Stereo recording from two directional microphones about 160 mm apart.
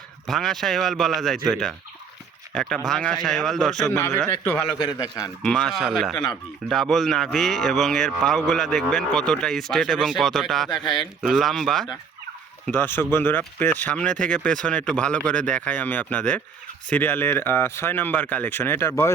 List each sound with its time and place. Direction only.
0.3 s speech: centre (ahead or behind)
4.3 s speech: 15° left (ahead or behind)
4.8 s a man's voice: 25° left (ahead or behind)
5.4 s speech: 5° left (ahead or behind)
12.6 s speech: 10° left (ahead or behind)